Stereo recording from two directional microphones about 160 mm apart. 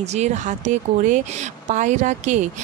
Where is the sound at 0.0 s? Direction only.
45° right (ahead or behind).